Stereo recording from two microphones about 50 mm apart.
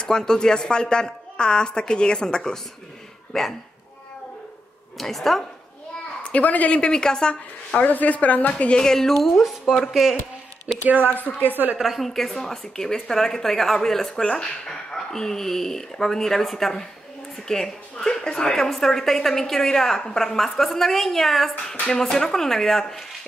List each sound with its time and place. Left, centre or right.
0.0 s a woman's voice: centre
4.9 s speech: centre
6.2 s a woman's voice: left
7.8 s speech: left
8.7 s speech: centre
11.1 s speech: left
11.4 s a woman's voice: right
11.8 s a woman's voice: centre